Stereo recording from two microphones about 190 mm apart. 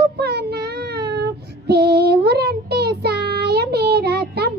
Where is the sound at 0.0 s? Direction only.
60° right (ahead or behind).